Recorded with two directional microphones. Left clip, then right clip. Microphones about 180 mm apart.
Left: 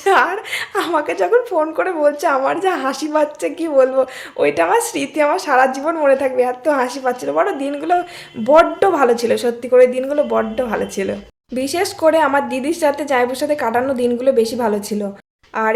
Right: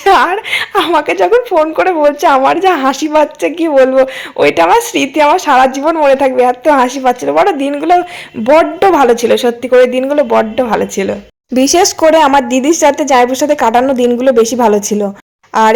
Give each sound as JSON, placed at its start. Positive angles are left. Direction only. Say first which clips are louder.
{"t": 0.0, "sound": "speech", "louder": "right 6 dB", "side_deg": -25}
{"t": 11.5, "sound": "a woman's voice", "louder": "right 11 dB", "side_deg": -40}